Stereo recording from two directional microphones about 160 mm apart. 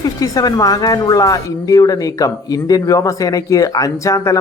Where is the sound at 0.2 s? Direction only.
20° left (ahead or behind).